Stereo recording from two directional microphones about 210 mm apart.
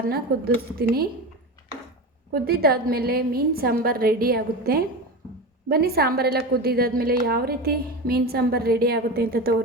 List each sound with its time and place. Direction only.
0.1 s a woman's voice: 50° right (ahead or behind)
2.3 s a woman's voice: 45° right (ahead or behind)